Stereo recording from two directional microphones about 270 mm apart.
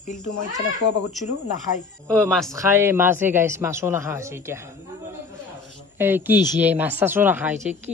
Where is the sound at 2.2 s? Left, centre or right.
Centre.